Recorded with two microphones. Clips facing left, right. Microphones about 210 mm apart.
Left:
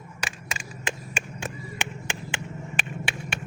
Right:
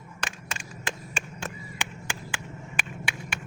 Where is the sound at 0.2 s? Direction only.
10° left (ahead or behind).